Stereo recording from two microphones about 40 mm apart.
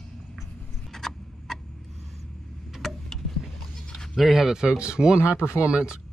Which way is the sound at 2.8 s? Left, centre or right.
Centre.